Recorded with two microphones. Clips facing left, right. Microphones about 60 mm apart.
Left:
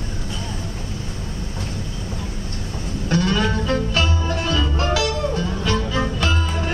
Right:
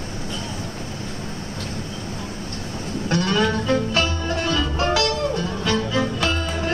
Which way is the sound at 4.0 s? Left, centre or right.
Centre.